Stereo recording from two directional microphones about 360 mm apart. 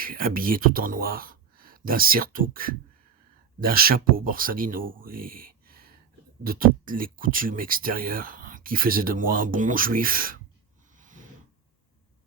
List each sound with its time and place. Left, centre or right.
0.0 s speech: right